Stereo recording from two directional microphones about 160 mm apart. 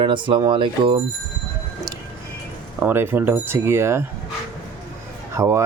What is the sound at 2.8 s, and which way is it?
Speech, 15° right (ahead or behind).